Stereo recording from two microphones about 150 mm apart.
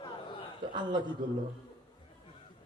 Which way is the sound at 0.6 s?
30° right (ahead or behind).